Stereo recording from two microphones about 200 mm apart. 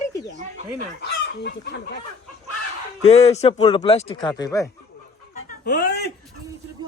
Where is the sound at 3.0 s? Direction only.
30° left (ahead or behind).